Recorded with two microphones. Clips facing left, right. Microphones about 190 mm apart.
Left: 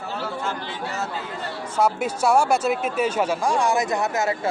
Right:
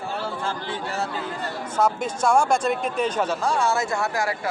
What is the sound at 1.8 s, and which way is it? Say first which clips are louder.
Speech: left 1 dB; 10° left (ahead or behind).